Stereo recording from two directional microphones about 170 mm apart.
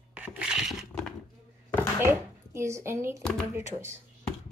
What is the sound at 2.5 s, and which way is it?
A woman's voice, 15° right (ahead or behind).